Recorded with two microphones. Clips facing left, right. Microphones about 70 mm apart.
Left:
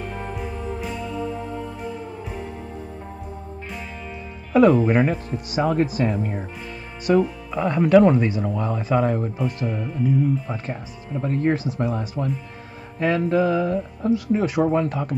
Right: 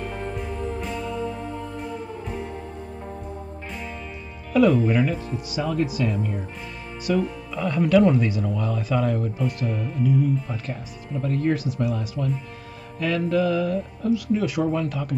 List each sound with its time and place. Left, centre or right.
0.2 s music: centre
4.5 s speech: left